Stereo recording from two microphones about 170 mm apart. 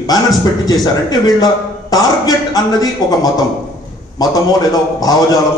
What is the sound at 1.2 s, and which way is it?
A man's voice, 20° left (ahead or behind).